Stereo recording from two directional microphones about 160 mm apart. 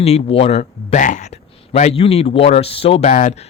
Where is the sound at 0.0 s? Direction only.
40° left (ahead or behind).